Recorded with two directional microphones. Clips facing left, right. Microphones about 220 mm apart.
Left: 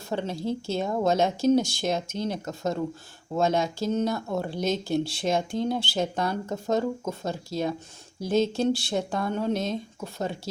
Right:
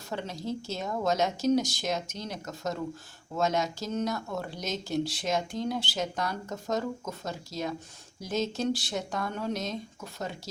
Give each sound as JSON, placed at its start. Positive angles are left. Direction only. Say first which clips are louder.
{"t": 0.1, "sound": "speech", "louder": "left 5 dB", "side_deg": 30}